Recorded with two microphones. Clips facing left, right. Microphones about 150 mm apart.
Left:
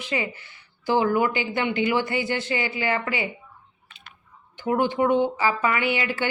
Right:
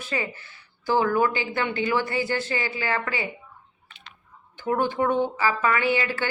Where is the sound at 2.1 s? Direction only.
35° right (ahead or behind).